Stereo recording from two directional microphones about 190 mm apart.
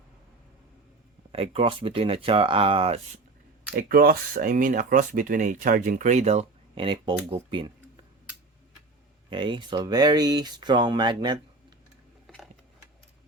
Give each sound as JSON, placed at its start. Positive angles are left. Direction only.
{"t": 1.3, "sound": "speech", "side_deg": -30}
{"t": 3.8, "sound": "speech", "side_deg": -50}
{"t": 9.3, "sound": "speech", "side_deg": -25}